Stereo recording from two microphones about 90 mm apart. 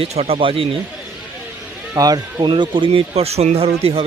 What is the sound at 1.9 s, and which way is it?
Speech, 45° right (ahead or behind).